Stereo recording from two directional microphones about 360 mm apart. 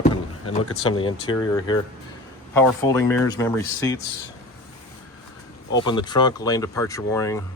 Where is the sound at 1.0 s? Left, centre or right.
Centre.